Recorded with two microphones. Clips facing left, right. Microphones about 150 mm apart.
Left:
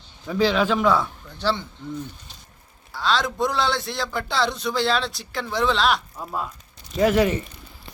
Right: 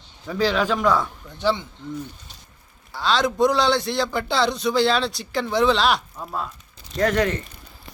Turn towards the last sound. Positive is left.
turn(degrees=10)  # may be behind; listen again after turning